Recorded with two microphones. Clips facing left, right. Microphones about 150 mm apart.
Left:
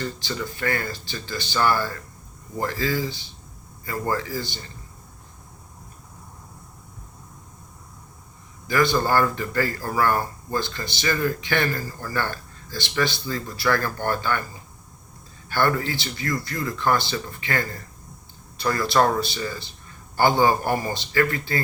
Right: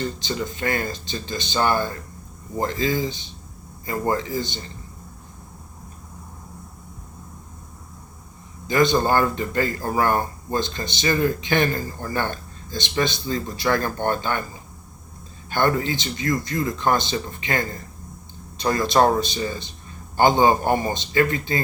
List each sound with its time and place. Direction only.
0.0 s speech: 20° right (ahead or behind)
8.6 s speech: 20° right (ahead or behind)
15.4 s speech: 20° right (ahead or behind)